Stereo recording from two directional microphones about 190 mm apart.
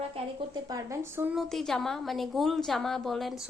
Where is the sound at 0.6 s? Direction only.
15° right (ahead or behind).